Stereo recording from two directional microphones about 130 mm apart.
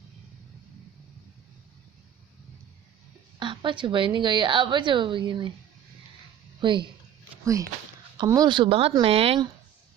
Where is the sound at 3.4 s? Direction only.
40° right (ahead or behind).